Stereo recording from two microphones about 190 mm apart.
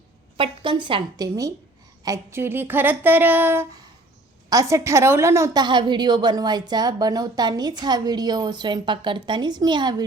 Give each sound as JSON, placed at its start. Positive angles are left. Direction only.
{"t": 0.3, "sound": "a woman's voice", "side_deg": -25}
{"t": 2.0, "sound": "a sound", "side_deg": -15}
{"t": 4.4, "sound": "a woman's voice", "side_deg": -15}